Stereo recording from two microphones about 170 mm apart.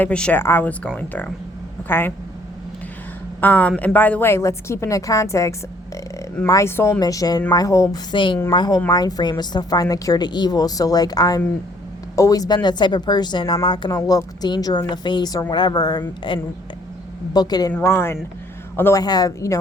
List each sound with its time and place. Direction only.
0.0 s a woman's voice: 5° left (ahead or behind)
3.4 s a woman's voice: 10° left (ahead or behind)